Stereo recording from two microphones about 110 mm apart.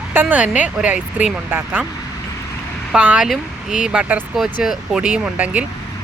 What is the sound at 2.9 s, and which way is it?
Speech, 10° right (ahead or behind).